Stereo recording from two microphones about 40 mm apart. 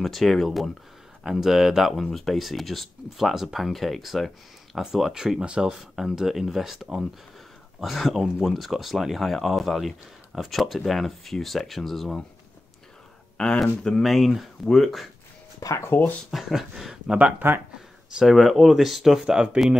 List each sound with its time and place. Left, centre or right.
0.0 s speech: centre
5.4 s speech: right
5.7 s speech: centre
13.4 s speech: centre
14.0 s speech: centre
15.9 s speech: left
16.3 s speech: centre
17.4 s speech: right
18.2 s speech: centre
19.2 s speech: right